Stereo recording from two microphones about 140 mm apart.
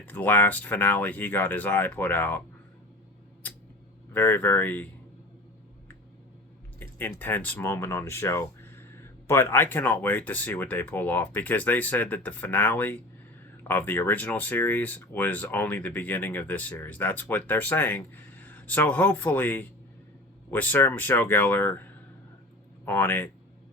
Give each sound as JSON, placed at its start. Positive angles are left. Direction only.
{"t": 0.0, "sound": "speech", "side_deg": 15}
{"t": 3.4, "sound": "a sound", "side_deg": 10}
{"t": 4.1, "sound": "speech", "side_deg": 15}
{"t": 6.7, "sound": "speech", "side_deg": 15}
{"t": 22.9, "sound": "speech", "side_deg": 15}